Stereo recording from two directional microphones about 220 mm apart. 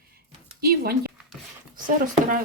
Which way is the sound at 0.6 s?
45° right (ahead or behind).